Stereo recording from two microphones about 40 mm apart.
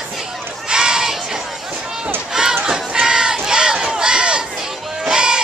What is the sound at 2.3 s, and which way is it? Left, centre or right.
Run, centre.